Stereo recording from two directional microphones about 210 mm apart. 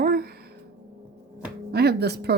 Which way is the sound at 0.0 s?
45° right (ahead or behind).